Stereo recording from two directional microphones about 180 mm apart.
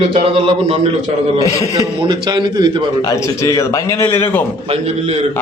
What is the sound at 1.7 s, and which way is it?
A man's voice, 25° right (ahead or behind).